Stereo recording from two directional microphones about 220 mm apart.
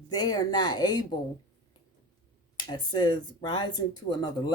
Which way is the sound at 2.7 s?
20° left (ahead or behind).